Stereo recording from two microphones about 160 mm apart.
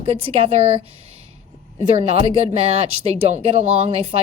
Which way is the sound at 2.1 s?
35° right (ahead or behind).